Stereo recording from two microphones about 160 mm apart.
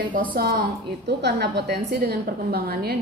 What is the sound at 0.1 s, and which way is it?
A woman's voice, 60° right (ahead or behind).